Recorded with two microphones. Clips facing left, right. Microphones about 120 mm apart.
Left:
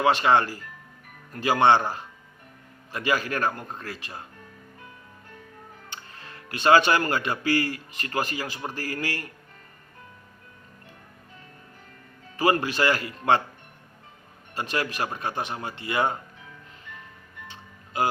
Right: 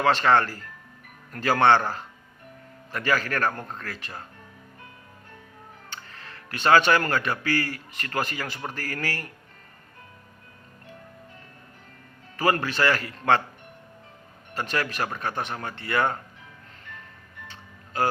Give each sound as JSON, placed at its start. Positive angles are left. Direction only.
{"t": 0.0, "sound": "a man's voice", "side_deg": 15}
{"t": 6.2, "sound": "speech", "side_deg": 20}
{"t": 12.4, "sound": "a man's voice", "side_deg": 15}
{"t": 14.5, "sound": "a man's voice", "side_deg": 15}
{"t": 17.5, "sound": "music", "side_deg": 15}